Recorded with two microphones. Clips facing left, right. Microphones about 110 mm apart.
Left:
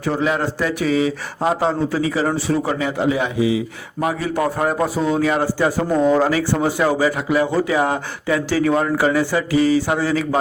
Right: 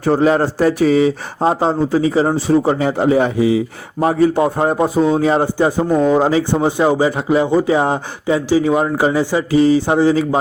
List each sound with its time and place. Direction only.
0.0 s speech: 40° right (ahead or behind)